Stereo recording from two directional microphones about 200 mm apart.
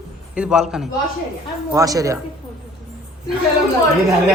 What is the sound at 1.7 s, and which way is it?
Speech, 15° right (ahead or behind).